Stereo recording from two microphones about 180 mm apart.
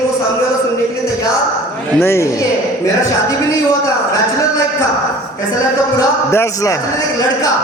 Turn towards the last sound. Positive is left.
turn(degrees=20)  # may be behind; listen again after turning